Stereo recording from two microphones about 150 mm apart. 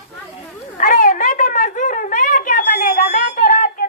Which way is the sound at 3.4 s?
70° left (ahead or behind).